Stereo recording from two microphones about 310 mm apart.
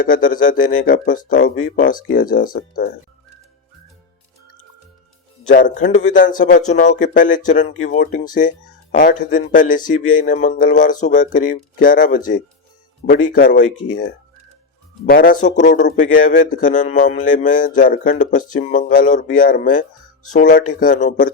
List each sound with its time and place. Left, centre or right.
0.0 s speech: left
5.5 s speech: left
15.1 s speech: left